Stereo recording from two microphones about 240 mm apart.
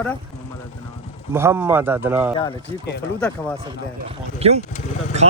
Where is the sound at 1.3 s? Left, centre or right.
Centre.